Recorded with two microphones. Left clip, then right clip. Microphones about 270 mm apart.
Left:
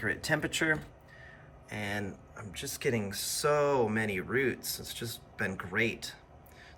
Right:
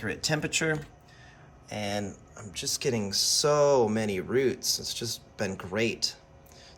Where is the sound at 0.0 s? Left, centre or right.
Centre.